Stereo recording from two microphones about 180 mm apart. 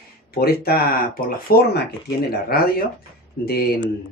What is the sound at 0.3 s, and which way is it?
Speech, 60° left (ahead or behind).